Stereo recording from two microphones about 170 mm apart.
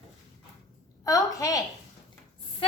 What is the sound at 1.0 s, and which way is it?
Speech, 20° left (ahead or behind).